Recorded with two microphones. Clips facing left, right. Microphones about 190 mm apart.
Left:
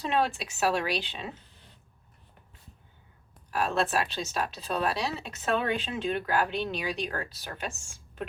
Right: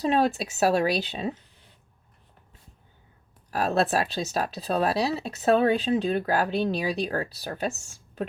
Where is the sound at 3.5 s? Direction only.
40° right (ahead or behind).